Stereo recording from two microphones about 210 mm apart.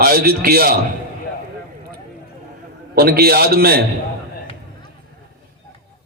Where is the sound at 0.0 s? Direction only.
45° right (ahead or behind).